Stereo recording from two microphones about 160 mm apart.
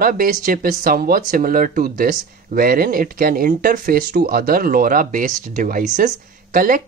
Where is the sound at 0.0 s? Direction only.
60° right (ahead or behind).